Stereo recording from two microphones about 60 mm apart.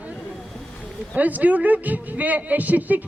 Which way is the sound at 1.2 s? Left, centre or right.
Right.